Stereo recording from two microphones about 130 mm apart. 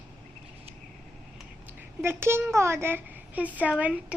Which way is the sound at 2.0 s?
20° right (ahead or behind).